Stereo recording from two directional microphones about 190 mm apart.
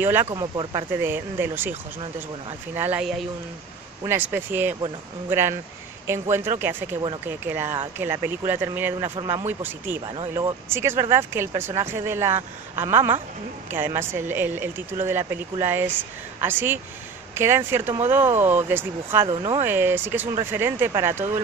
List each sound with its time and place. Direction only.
0.0 s speech: 10° right (ahead or behind)
0.3 s speech: 20° right (ahead or behind)
19.2 s speech: 25° right (ahead or behind)
19.6 s speech: 10° right (ahead or behind)